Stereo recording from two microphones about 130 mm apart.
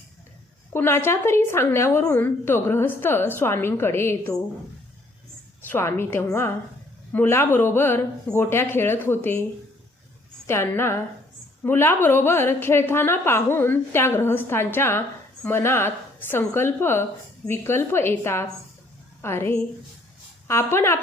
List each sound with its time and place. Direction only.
0.7 s a woman's voice: 20° left (ahead or behind)
5.6 s a woman's voice: 20° left (ahead or behind)
10.4 s a woman's voice: 20° left (ahead or behind)